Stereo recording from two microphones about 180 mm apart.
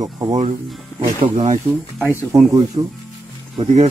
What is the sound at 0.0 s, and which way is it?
Speech, 20° right (ahead or behind).